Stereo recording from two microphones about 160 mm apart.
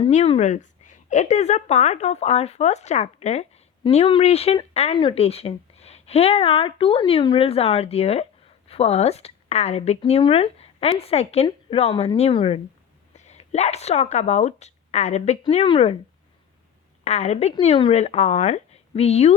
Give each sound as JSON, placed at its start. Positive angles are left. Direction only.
{"t": 0.1, "sound": "a woman's voice", "side_deg": 45}
{"t": 3.8, "sound": "speech", "side_deg": 35}
{"t": 17.0, "sound": "a woman's voice", "side_deg": 45}